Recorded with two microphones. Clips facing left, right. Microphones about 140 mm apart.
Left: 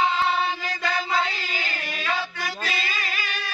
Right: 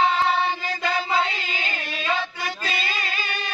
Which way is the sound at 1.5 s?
20° right (ahead or behind).